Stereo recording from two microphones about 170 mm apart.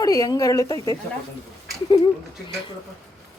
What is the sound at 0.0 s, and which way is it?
Speech, 20° left (ahead or behind).